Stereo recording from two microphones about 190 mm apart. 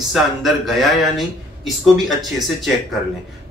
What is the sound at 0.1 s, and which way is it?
Speech, centre (ahead or behind).